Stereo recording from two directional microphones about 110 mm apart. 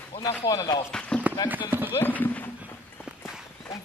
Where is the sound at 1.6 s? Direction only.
20° right (ahead or behind).